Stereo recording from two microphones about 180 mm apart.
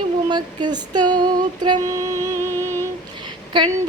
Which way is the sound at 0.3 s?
25° right (ahead or behind).